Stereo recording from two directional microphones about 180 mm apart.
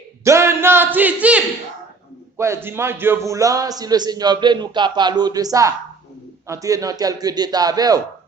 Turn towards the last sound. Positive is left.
turn(degrees=-20)  # may be behind; listen again after turning